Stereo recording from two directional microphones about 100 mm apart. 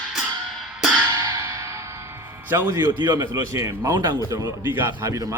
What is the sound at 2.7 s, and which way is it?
Speech, 45° right (ahead or behind).